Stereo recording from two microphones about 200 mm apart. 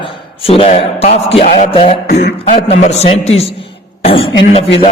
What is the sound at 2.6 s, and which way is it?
A man's voice, 30° left (ahead or behind).